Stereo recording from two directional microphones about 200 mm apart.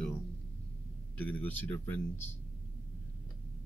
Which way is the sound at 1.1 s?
10° left (ahead or behind).